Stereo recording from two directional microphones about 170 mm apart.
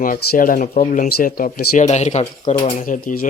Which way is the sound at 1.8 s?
40° left (ahead or behind).